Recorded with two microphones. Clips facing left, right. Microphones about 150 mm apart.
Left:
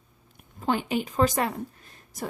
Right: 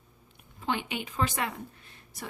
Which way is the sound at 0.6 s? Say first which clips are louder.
Left 6 dB; 40° left (ahead or behind).